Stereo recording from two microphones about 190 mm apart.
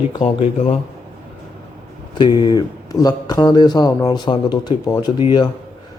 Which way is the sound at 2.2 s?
25° left (ahead or behind).